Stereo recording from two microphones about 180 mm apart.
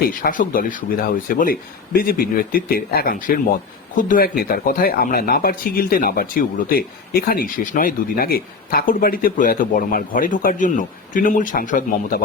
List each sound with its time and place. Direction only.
0.1 s speech: 50° left (ahead or behind)